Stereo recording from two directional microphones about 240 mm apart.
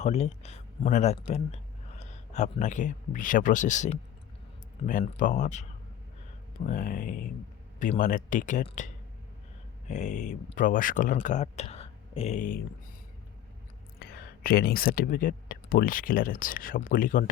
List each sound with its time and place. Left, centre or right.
0.0 s speech: left
6.7 s speech: left
9.9 s speech: left
14.0 s speech: left